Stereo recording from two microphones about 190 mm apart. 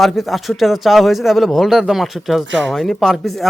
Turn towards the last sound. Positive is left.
turn(degrees=0)  # may be behind; listen again after turning